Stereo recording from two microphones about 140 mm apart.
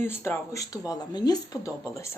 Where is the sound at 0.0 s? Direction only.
15° left (ahead or behind).